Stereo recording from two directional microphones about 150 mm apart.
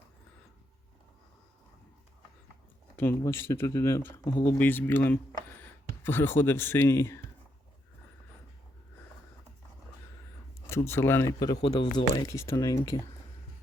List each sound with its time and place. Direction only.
2.9 s speech: 15° left (ahead or behind)
10.7 s speech: 15° left (ahead or behind)